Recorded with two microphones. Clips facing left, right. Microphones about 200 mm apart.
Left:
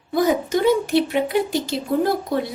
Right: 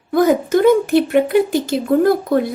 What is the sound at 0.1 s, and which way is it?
A woman's voice, 55° right (ahead or behind).